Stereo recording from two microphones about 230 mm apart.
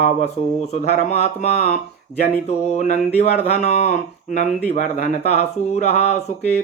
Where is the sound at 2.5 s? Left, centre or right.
Left.